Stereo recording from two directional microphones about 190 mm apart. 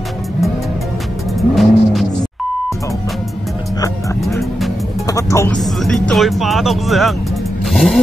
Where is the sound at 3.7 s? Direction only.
20° left (ahead or behind).